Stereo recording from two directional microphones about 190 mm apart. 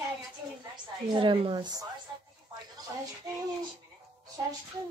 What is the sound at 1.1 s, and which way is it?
Speech, 25° right (ahead or behind).